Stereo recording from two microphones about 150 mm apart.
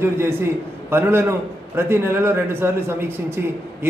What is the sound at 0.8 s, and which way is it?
A man's voice, 15° right (ahead or behind).